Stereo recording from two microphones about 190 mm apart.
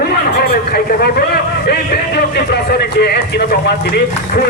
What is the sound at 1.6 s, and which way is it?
Speech, 55° left (ahead or behind).